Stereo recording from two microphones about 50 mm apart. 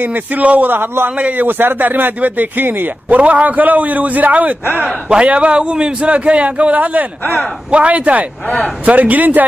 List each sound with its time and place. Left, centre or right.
0.0 s a man's voice: right
0.7 s a man's voice: right
1.1 s a man's voice: right
3.2 s a man's voice: right
4.8 s a man's voice: right